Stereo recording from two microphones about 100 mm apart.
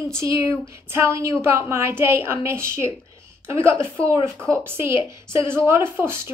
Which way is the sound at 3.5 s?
65° left (ahead or behind).